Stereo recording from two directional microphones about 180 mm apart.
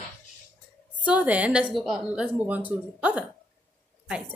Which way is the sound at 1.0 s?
10° right (ahead or behind).